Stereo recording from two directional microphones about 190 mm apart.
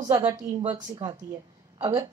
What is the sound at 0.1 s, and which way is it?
Speech, 20° right (ahead or behind).